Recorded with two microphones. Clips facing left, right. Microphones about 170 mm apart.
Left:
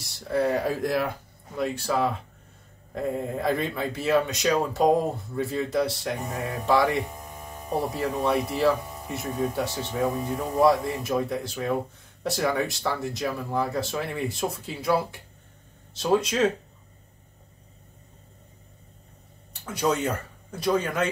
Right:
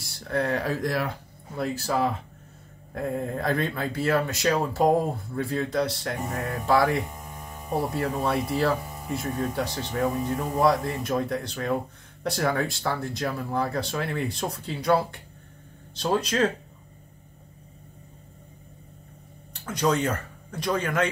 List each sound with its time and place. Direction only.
0.0 s speech: centre (ahead or behind)
1.6 s speech: centre (ahead or behind)
19.5 s speech: 5° left (ahead or behind)